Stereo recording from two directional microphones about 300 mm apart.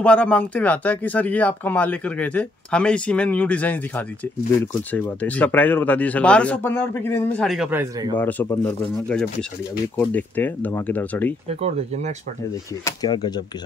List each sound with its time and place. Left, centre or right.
0.0 s speech: centre
8.2 s speech: centre
11.4 s speech: right
12.8 s speech: centre